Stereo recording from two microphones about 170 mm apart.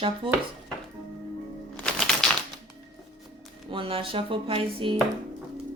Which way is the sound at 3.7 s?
30° right (ahead or behind).